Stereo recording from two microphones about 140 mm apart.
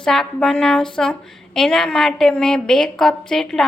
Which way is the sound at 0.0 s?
5° left (ahead or behind).